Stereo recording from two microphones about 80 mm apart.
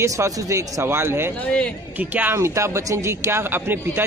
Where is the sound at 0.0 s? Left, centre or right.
Right.